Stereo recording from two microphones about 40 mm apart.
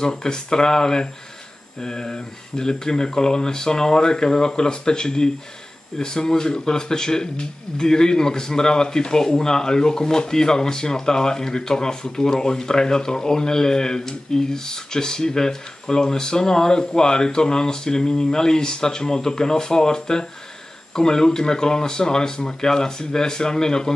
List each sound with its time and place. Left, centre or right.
0.0 s speech: centre